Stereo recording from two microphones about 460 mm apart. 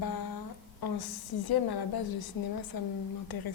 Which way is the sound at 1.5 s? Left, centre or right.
Left.